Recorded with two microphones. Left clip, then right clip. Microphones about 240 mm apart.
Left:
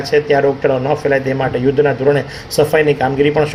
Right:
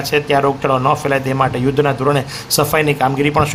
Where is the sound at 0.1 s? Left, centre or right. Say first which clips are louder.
Left 2 dB; right.